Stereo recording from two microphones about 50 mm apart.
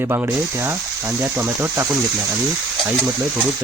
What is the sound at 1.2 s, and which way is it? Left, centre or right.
Speech, right.